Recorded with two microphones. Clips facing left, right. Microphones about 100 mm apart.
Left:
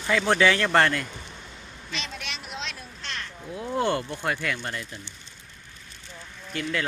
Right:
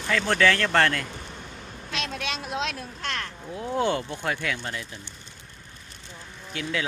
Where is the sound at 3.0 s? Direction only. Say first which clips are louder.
Right 5 dB; 60° right (ahead or behind).